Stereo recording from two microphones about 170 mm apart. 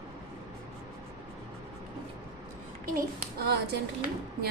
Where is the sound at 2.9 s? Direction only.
65° right (ahead or behind).